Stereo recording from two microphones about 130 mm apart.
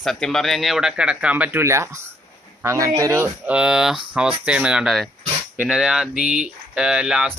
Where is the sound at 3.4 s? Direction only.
5° right (ahead or behind).